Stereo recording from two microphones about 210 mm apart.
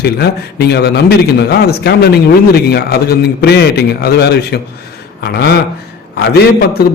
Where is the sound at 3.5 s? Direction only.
50° left (ahead or behind).